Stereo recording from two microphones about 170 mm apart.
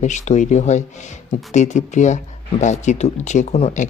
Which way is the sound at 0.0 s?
45° left (ahead or behind).